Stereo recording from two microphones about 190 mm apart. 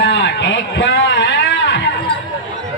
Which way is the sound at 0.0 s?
70° left (ahead or behind).